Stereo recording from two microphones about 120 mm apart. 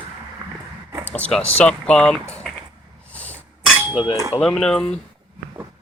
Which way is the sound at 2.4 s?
Centre (ahead or behind).